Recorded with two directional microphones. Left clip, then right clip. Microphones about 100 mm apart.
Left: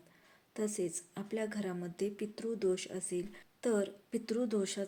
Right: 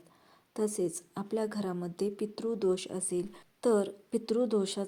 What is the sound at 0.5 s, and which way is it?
A woman's voice, 30° right (ahead or behind).